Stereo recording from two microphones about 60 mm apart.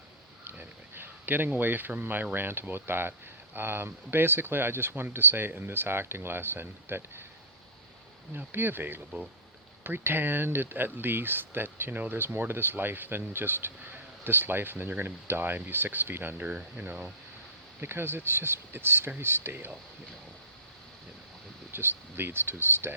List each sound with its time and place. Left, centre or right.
0.4 s a sound: right
1.0 s speech: right
8.3 s speech: right
17.7 s speech: right
21.7 s speech: right